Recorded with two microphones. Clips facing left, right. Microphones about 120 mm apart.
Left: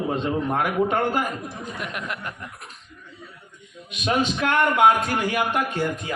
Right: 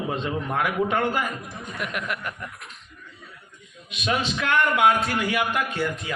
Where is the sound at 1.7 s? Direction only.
25° left (ahead or behind).